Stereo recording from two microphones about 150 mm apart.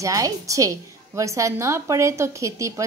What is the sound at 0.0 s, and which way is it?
A woman's voice, 20° right (ahead or behind).